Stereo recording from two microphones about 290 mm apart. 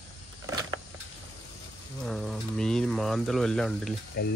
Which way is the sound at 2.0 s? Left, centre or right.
Centre.